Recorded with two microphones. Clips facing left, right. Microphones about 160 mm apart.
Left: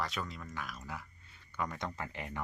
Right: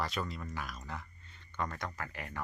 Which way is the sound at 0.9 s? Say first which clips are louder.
Even; 5° left (ahead or behind).